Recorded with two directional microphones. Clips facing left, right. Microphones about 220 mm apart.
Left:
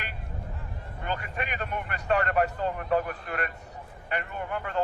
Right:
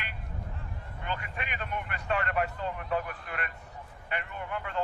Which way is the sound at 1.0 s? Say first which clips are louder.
Left 4 dB; 40° left (ahead or behind).